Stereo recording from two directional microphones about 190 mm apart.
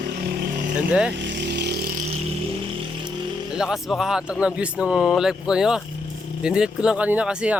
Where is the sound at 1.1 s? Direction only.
70° right (ahead or behind).